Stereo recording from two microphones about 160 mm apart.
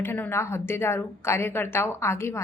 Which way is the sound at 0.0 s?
15° left (ahead or behind).